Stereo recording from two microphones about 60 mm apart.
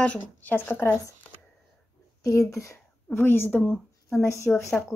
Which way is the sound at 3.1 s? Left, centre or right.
Left.